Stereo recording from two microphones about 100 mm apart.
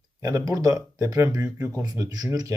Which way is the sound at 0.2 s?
35° right (ahead or behind).